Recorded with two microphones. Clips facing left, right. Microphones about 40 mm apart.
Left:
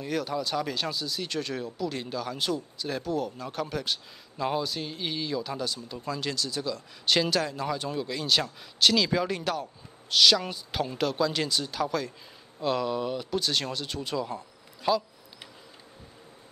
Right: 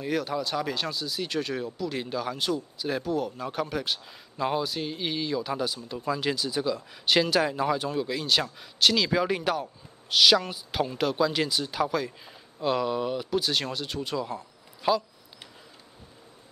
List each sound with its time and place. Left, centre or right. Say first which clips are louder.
0.0 s speech: right 1 dB; centre